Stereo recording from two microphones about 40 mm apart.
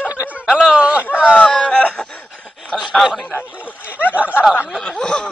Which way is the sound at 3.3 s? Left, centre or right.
Left.